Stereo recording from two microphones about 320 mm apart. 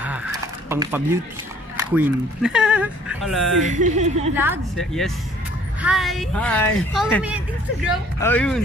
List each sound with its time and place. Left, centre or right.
0.0 s a sound: centre
1.8 s a woman's voice: centre
3.6 s speech: right
4.4 s a woman's voice: centre